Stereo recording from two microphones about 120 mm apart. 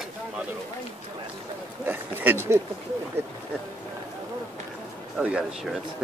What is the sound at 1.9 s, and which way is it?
Speech, 20° right (ahead or behind).